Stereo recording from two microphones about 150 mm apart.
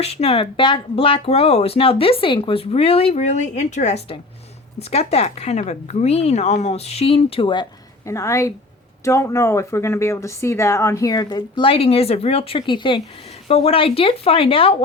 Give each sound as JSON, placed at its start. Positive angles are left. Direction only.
{"t": 0.0, "sound": "a woman's voice", "side_deg": 45}
{"t": 8.0, "sound": "speech", "side_deg": 20}